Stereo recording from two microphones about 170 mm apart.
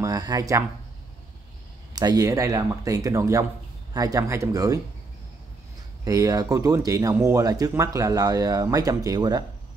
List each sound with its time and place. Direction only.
0.0 s speech: 20° right (ahead or behind)
2.0 s speech: 20° right (ahead or behind)
6.0 s speech: 20° right (ahead or behind)